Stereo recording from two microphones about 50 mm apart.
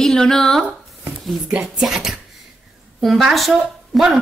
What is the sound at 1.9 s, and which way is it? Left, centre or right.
A woman's voice, centre.